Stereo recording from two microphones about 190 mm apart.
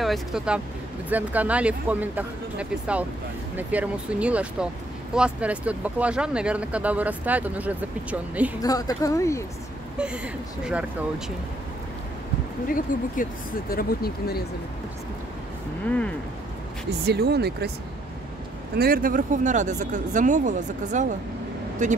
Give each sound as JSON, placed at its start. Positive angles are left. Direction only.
{"t": 0.0, "sound": "speech", "side_deg": 0}
{"t": 8.6, "sound": "speech", "side_deg": 20}
{"t": 9.9, "sound": "speech", "side_deg": -5}
{"t": 12.7, "sound": "speech", "side_deg": 45}
{"t": 17.0, "sound": "speech", "side_deg": -60}
{"t": 18.8, "sound": "speech", "side_deg": -50}